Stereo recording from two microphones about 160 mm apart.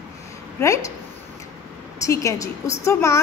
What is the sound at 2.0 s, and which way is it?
A woman's voice, 20° left (ahead or behind).